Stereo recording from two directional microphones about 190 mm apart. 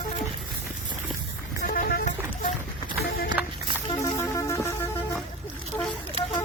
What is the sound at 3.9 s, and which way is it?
Music, 20° left (ahead or behind).